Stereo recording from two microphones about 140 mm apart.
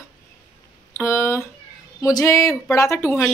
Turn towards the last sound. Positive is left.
turn(degrees=20)  # may be behind; listen again after turning